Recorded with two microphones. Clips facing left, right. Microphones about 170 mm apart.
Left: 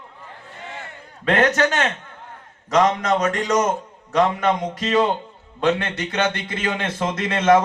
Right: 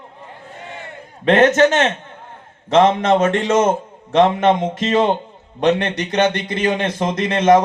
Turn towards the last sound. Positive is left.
turn(degrees=-15)  # may be behind; listen again after turning